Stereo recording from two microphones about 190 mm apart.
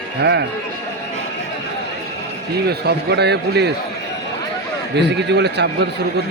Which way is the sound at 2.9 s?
60° right (ahead or behind).